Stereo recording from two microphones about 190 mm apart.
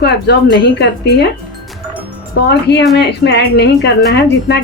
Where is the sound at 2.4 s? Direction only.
60° left (ahead or behind).